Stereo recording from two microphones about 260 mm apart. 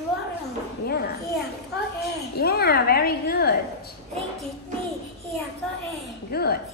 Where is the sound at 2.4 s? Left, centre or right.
Left.